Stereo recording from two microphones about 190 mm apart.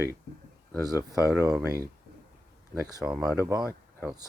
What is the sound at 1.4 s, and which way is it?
Speech, 15° right (ahead or behind).